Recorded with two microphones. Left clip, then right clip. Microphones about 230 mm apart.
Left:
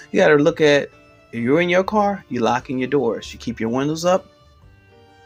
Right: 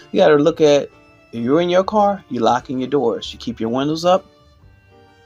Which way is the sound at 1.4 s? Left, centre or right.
Left.